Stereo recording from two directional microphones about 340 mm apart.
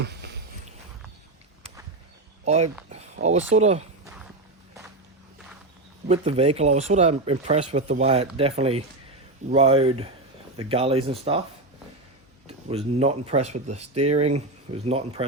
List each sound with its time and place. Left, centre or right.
0.0 s a sound: right
2.4 s speech: centre
6.1 s speech: centre
12.5 s speech: centre